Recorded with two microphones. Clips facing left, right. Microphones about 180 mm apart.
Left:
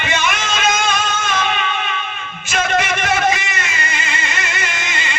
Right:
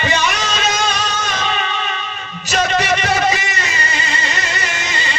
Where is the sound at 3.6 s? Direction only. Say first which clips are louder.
Right 2 dB; 35° right (ahead or behind).